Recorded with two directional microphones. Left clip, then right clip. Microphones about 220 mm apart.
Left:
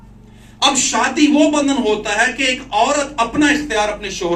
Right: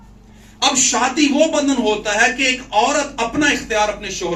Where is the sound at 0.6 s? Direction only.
20° left (ahead or behind).